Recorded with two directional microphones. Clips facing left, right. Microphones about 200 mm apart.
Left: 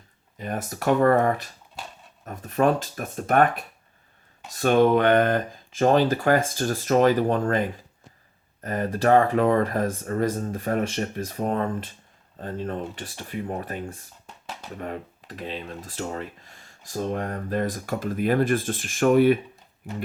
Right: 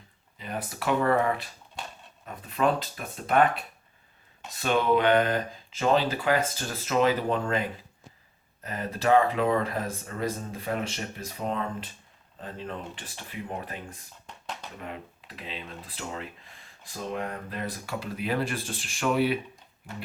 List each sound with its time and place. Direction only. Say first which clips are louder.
0.3 s speech: left 4 dB; 45° left (ahead or behind)
8.6 s speech: left 5 dB; 50° left (ahead or behind)
14.3 s a sound: even; 5° left (ahead or behind)
14.8 s speech: left 6 dB; 45° left (ahead or behind)